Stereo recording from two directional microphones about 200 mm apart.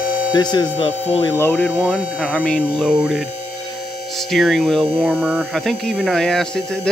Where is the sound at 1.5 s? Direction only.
5° left (ahead or behind).